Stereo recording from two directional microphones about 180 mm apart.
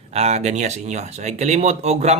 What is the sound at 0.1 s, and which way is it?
Speech, 35° right (ahead or behind).